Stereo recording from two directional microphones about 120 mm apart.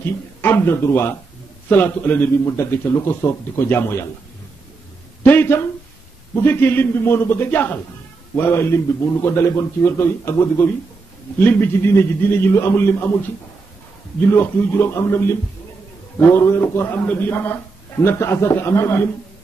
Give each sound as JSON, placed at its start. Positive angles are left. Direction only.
{"t": 0.4, "sound": "a man's voice", "side_deg": 15}
{"t": 5.2, "sound": "a man's voice", "side_deg": 15}
{"t": 14.3, "sound": "a man's voice", "side_deg": 20}